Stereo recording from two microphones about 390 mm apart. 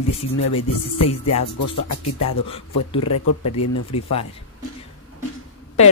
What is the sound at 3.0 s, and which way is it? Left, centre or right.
Speech, left.